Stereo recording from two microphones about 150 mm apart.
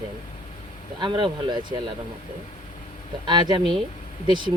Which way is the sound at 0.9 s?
30° right (ahead or behind).